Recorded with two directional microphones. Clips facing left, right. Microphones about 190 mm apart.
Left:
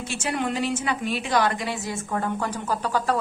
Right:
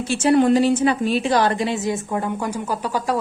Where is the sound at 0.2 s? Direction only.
35° right (ahead or behind).